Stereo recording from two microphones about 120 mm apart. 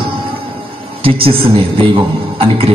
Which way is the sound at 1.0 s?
50° right (ahead or behind).